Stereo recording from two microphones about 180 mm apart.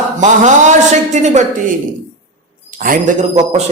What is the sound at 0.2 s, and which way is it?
A man's voice, 40° right (ahead or behind).